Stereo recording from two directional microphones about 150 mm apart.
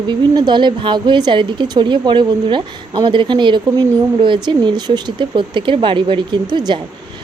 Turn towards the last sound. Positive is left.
turn(degrees=-30)  # may be behind; listen again after turning